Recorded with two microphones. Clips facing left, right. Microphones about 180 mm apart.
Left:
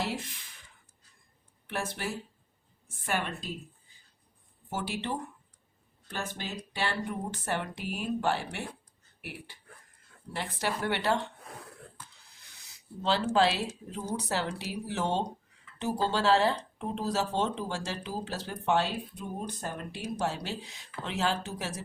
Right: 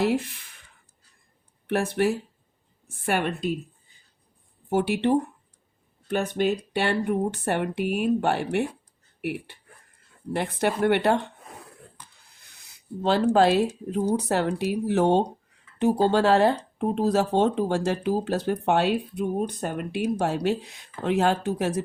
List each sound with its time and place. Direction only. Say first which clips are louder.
0.0 s speech: right 11 dB; 60° right (ahead or behind)
1.6 s speech: right 12 dB; 60° right (ahead or behind)
4.7 s speech: right 12 dB; 65° right (ahead or behind)
10.3 s speech: right 8 dB; 55° right (ahead or behind)
13.0 s speech: right 6 dB; 55° right (ahead or behind)
13.9 s speech: right 9 dB; 60° right (ahead or behind)